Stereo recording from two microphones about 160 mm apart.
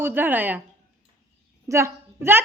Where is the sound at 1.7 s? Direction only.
15° right (ahead or behind).